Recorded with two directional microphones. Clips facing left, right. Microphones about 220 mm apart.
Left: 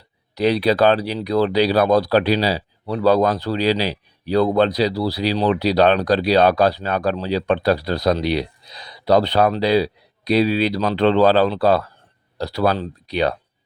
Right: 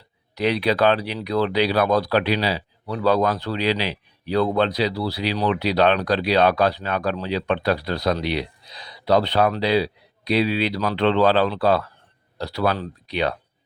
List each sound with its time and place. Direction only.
0.3 s speech: 35° left (ahead or behind)